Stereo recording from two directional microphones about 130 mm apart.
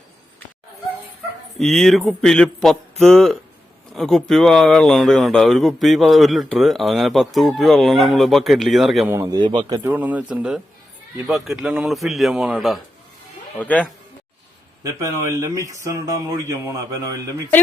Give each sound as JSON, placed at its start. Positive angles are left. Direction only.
{"t": 1.5, "sound": "speech", "side_deg": 5}
{"t": 9.0, "sound": "speech", "side_deg": -25}
{"t": 9.4, "sound": "a man's voice", "side_deg": -35}
{"t": 9.8, "sound": "speech", "side_deg": -10}
{"t": 13.6, "sound": "speech", "side_deg": 10}
{"t": 14.8, "sound": "speech", "side_deg": -25}